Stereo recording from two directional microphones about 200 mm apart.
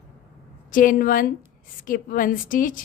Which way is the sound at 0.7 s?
45° left (ahead or behind).